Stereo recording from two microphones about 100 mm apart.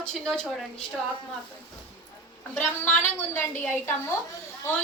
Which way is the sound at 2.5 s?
20° left (ahead or behind).